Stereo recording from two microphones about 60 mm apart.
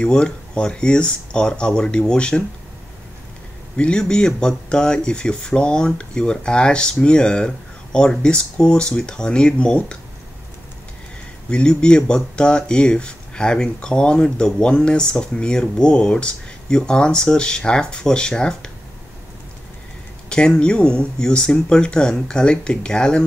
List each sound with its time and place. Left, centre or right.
0.0 s speech: centre
3.7 s speech: centre
11.5 s speech: centre
20.2 s speech: centre